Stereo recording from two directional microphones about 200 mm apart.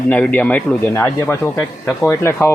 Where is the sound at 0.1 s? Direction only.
10° left (ahead or behind).